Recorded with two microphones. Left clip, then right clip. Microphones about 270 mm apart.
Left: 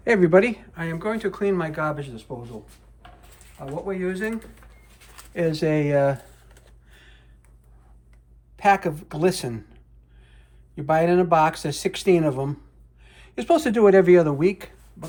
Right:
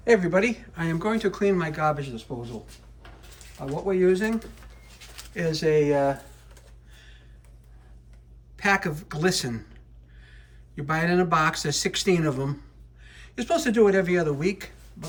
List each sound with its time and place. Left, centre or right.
0.0 s speech: left
0.7 s speech: centre
3.8 s speech: centre
5.1 s speech: centre; by 6.1 s left
6.9 s a sound: left
8.5 s speech: centre
10.8 s speech: centre